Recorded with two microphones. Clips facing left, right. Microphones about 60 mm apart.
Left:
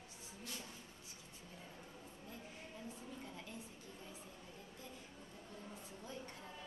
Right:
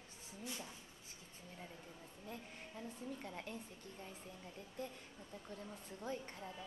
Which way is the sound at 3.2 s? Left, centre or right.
Right.